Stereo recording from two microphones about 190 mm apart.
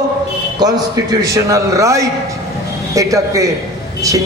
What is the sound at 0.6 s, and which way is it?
A man's voice, 20° right (ahead or behind).